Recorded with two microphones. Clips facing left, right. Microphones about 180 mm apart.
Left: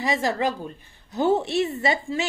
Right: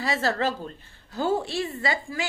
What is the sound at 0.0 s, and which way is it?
Speech, 15° left (ahead or behind).